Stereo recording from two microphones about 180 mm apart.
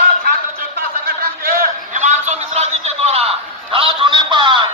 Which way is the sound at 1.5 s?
40° right (ahead or behind).